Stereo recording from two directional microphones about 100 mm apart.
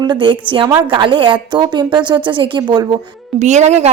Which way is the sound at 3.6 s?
90° right.